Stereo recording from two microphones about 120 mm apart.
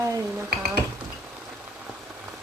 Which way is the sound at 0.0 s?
25° right (ahead or behind).